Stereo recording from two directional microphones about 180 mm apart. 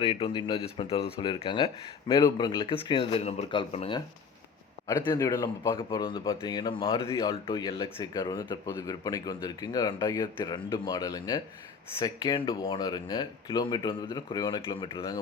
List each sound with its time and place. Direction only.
0.0 s speech: 30° left (ahead or behind)
4.9 s speech: 20° left (ahead or behind)